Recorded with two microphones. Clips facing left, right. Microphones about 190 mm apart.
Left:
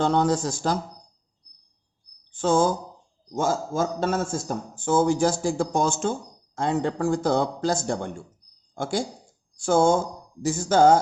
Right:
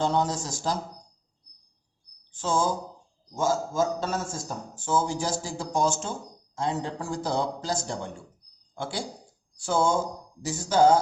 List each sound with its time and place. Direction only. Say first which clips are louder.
0.0 s a man's voice: left 5 dB; 60° left (ahead or behind)
2.3 s a man's voice: left 5 dB; 60° left (ahead or behind)
8.7 s speech: left 6 dB; 45° left (ahead or behind)